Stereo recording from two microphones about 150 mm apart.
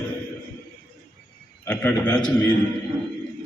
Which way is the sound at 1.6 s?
10° left (ahead or behind).